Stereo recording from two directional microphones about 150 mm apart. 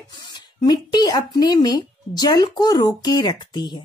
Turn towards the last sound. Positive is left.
turn(degrees=30)  # may be behind; listen again after turning